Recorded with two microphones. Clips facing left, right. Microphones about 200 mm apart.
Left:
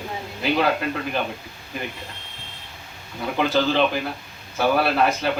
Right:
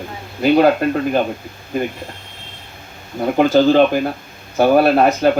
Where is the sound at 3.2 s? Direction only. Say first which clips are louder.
Right 9 dB; 45° right (ahead or behind).